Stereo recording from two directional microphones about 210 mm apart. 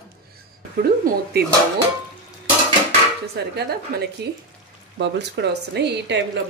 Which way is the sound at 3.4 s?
50° right (ahead or behind).